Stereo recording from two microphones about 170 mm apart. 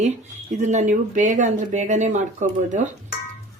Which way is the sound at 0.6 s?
45° right (ahead or behind).